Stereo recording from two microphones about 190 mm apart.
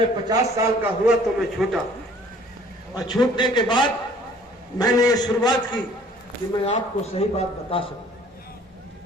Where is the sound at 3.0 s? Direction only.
20° left (ahead or behind).